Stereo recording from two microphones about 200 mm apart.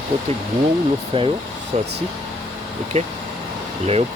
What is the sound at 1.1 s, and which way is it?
Speech, 30° right (ahead or behind).